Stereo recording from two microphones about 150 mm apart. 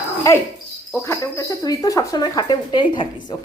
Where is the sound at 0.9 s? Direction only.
15° left (ahead or behind).